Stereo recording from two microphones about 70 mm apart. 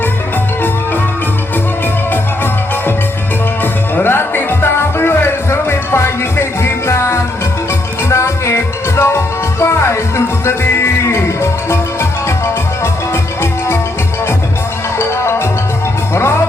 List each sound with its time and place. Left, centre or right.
3.6 s music: left
14.9 s music: left